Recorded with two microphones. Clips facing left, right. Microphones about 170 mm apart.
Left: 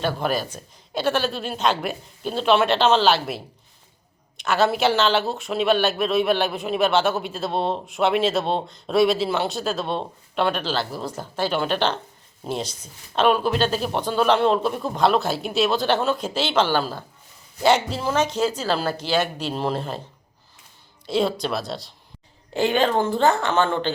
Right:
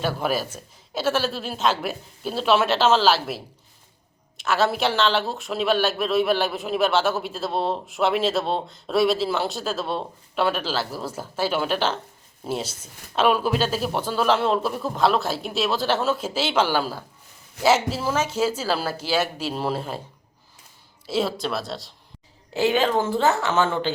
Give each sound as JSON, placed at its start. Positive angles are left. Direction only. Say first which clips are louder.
{"t": 0.0, "sound": "speech", "louder": "left 1 dB", "side_deg": -5}
{"t": 21.1, "sound": "speech", "louder": "left 2 dB", "side_deg": -5}